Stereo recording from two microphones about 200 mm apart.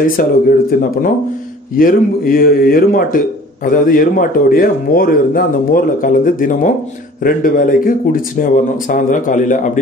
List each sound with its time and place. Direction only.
0.0 s a man's voice: 45° left (ahead or behind)